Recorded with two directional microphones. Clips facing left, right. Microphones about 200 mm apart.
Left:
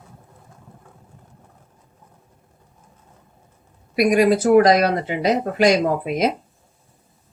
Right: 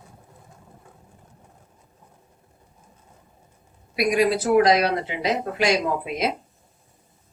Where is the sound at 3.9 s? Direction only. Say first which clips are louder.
Left 5 dB; 45° left (ahead or behind).